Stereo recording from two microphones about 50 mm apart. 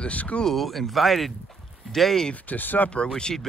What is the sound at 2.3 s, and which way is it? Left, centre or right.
Speech, left.